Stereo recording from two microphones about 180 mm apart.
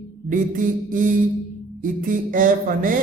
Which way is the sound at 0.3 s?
45° right (ahead or behind).